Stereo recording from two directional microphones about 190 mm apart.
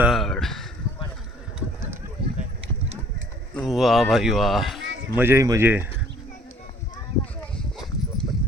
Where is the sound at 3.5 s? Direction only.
Centre (ahead or behind).